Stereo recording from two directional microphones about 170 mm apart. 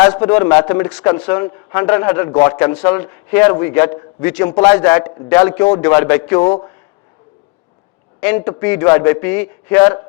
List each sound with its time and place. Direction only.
0.0 s a man's voice: 10° left (ahead or behind)
5.7 s speech: 20° left (ahead or behind)
6.0 s a man's voice: 10° left (ahead or behind)
8.4 s a man's voice: 10° left (ahead or behind)